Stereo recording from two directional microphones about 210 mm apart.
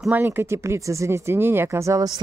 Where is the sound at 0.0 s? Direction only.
10° right (ahead or behind).